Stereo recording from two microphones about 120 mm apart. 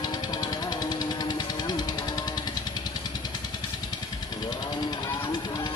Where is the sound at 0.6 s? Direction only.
35° left (ahead or behind).